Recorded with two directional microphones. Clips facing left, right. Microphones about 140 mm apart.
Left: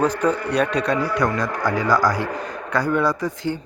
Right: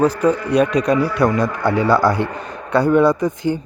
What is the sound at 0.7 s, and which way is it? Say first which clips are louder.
Speech: right 5 dB; 30° left (ahead or behind).